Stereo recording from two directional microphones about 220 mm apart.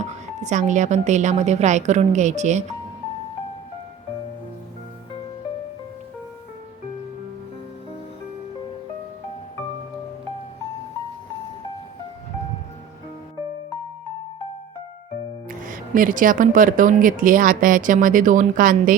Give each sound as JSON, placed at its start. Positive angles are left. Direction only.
{"t": 0.0, "sound": "speech", "side_deg": -30}
{"t": 15.4, "sound": "speech", "side_deg": -40}